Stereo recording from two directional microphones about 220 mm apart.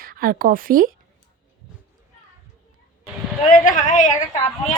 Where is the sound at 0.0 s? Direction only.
40° right (ahead or behind).